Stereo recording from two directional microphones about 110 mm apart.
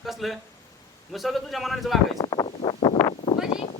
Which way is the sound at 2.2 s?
35° left (ahead or behind).